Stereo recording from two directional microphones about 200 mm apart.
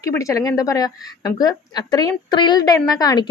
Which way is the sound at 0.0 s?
15° left (ahead or behind).